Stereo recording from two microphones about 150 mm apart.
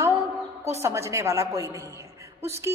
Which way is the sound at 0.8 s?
20° right (ahead or behind).